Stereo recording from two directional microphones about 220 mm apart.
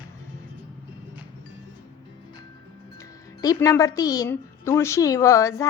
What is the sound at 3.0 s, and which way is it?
A woman's voice, 15° left (ahead or behind).